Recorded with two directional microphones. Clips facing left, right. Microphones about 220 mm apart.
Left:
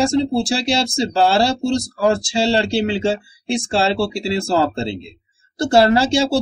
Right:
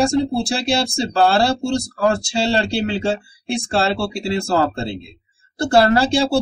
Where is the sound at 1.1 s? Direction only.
20° left (ahead or behind).